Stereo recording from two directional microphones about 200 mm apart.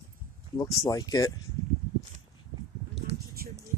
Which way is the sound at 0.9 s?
20° left (ahead or behind).